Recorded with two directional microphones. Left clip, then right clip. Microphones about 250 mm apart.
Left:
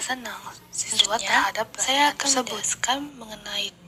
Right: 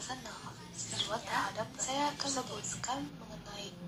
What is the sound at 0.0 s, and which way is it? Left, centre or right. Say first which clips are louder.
A woman's voice: left 13 dB; left.